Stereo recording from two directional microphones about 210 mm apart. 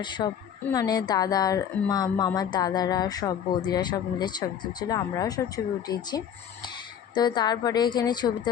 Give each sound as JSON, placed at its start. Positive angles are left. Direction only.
{"t": 0.0, "sound": "a woman's voice", "side_deg": 20}